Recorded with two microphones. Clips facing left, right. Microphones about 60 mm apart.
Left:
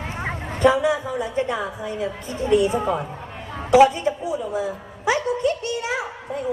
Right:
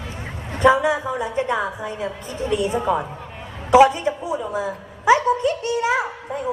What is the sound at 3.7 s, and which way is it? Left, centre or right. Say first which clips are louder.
A man's voice: right 1 dB; right.